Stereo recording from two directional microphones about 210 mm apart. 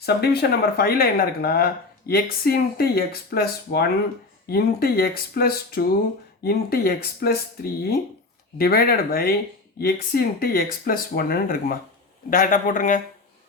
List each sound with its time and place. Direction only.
0.0 s a man's voice: 50° left (ahead or behind)